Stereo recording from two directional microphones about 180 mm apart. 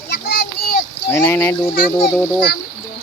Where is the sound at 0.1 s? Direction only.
60° left (ahead or behind).